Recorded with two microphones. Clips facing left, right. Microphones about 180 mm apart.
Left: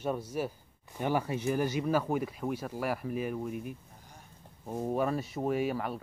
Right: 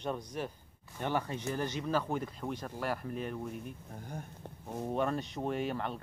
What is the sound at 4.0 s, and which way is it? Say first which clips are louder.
Speech: right 11 dB; 55° right (ahead or behind).